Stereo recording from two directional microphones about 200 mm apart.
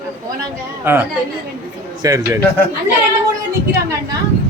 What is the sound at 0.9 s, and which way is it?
A woman's voice, 10° right (ahead or behind).